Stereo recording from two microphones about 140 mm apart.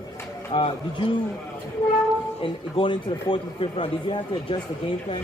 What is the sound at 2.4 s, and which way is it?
Speech, 40° left (ahead or behind).